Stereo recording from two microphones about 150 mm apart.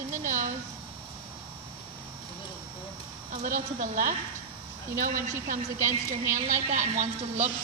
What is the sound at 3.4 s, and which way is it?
A woman's voice, 65° right (ahead or behind).